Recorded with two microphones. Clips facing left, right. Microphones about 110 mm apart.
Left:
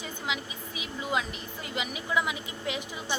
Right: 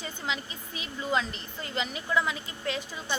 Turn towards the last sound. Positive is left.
turn(degrees=15)  # may be behind; listen again after turning